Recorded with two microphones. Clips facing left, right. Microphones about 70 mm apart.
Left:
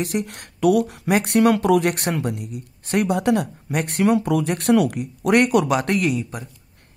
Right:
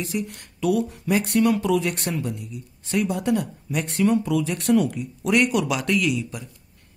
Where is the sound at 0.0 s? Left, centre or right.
Left.